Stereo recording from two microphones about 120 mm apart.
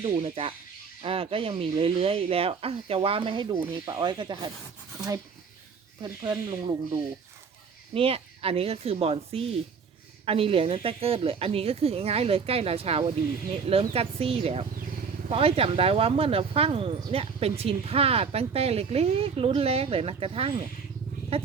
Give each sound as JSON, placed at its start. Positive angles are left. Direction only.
{"t": 0.0, "sound": "speech", "side_deg": -55}
{"t": 6.0, "sound": "speech", "side_deg": -35}
{"t": 7.9, "sound": "speech", "side_deg": -50}